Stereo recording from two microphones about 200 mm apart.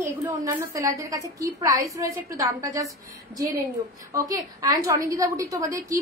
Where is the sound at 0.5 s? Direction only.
15° right (ahead or behind).